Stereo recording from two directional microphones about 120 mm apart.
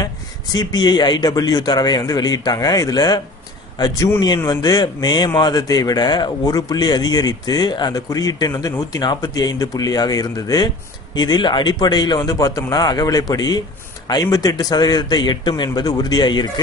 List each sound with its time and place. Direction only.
0.0 s speech: 35° left (ahead or behind)